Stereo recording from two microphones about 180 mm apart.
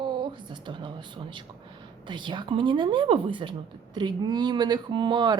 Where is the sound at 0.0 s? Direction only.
25° right (ahead or behind).